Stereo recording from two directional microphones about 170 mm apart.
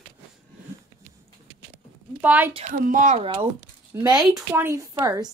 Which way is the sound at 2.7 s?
50° right (ahead or behind).